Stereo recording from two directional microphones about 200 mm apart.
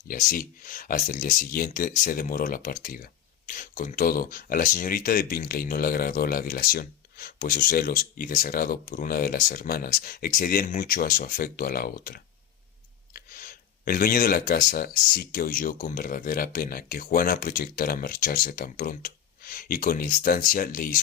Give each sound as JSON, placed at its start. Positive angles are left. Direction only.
{"t": 0.1, "sound": "speech", "side_deg": 45}